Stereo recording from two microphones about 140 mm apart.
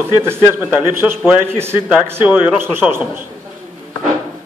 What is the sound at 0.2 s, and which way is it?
A man's voice, 15° right (ahead or behind).